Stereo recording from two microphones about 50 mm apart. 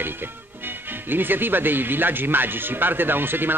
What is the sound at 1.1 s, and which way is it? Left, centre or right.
Speech, right.